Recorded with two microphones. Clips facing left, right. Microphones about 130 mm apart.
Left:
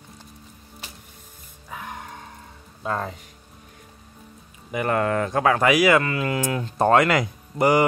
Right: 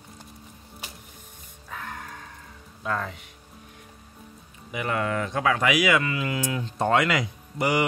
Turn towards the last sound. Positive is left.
turn(degrees=45)  # may be behind; listen again after turning